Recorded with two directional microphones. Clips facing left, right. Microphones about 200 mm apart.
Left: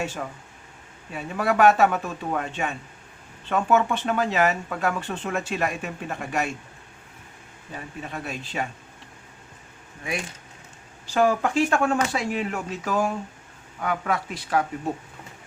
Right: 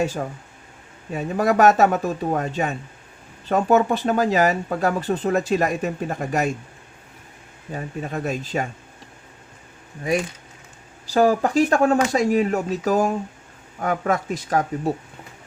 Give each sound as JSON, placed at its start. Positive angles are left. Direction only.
{"t": 0.0, "sound": "speech", "side_deg": -40}
{"t": 7.7, "sound": "speech", "side_deg": -45}
{"t": 10.1, "sound": "speech", "side_deg": -40}